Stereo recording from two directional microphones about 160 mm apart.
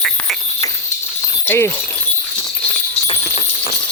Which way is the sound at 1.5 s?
15° left (ahead or behind).